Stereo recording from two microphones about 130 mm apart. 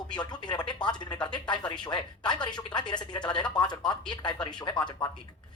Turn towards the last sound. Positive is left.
turn(degrees=30)  # may be behind; listen again after turning